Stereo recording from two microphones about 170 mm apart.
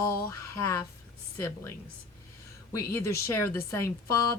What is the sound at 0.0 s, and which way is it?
A woman's voice, 15° left (ahead or behind).